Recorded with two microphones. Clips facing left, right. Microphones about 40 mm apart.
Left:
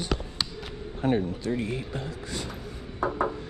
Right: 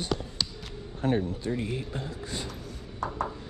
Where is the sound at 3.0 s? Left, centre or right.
Centre.